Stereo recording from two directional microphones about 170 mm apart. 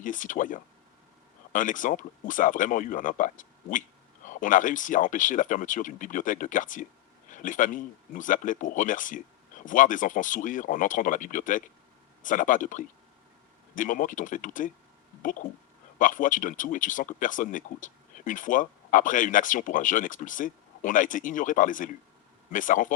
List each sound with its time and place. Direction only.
0.0 s speech: 50° left (ahead or behind)